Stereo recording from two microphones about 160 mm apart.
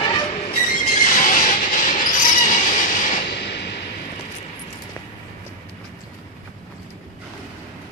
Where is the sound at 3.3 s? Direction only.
90° left.